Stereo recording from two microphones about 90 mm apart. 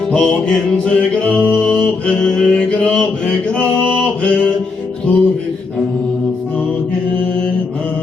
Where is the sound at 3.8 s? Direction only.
10° left (ahead or behind).